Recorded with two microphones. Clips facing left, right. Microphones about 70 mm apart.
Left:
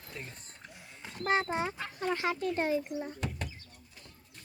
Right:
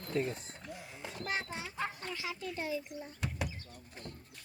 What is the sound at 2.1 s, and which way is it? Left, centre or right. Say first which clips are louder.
Speech: left 9 dB; left.